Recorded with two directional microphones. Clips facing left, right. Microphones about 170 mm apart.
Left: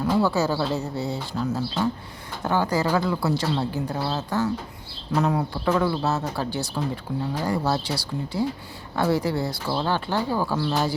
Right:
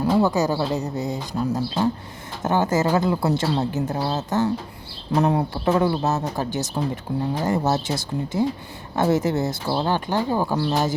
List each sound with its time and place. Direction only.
0.0 s a woman's voice: 20° right (ahead or behind)